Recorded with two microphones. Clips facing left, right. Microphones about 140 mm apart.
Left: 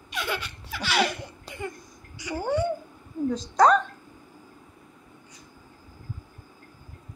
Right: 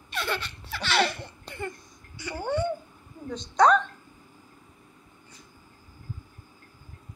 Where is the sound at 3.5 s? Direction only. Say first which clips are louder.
Left 1 dB; 5° left (ahead or behind).